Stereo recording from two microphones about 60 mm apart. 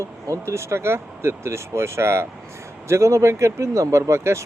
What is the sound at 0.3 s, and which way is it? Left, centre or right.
Speech, right.